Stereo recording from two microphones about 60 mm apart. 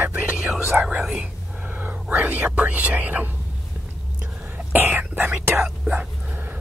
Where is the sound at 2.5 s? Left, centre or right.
Right.